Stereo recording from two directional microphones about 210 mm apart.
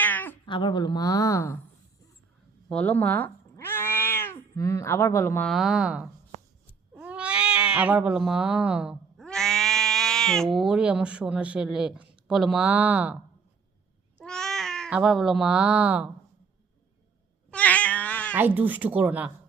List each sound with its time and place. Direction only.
0.0 s cat: 10° left (ahead or behind)
0.4 s speech: 25° left (ahead or behind)
2.6 s speech: 5° left (ahead or behind)
14.3 s speech: 5° left (ahead or behind)
17.5 s cat: 5° left (ahead or behind)
18.3 s speech: 10° right (ahead or behind)